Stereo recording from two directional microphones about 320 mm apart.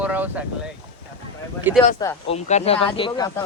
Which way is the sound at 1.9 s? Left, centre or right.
Centre.